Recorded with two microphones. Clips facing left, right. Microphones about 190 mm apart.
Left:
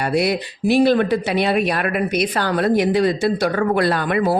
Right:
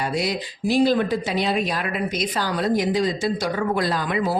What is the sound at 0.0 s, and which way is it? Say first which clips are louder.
Speech: left 5 dB; 65° left (ahead or behind).